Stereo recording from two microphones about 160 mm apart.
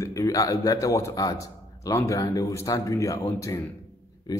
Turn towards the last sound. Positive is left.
turn(degrees=25)  # may be behind; listen again after turning